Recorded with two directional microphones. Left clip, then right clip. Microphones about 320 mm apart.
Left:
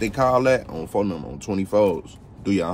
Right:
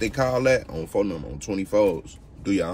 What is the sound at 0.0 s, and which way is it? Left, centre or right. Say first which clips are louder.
Speech: left 3 dB; centre.